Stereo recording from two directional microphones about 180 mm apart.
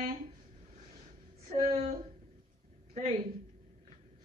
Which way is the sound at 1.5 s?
35° right (ahead or behind).